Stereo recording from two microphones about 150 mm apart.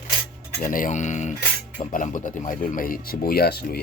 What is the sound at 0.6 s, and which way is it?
Speech, 60° left (ahead or behind).